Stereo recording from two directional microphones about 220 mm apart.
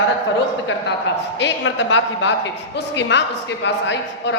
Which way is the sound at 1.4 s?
55° left (ahead or behind).